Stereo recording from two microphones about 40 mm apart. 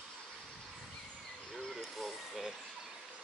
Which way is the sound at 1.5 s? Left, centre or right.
Centre.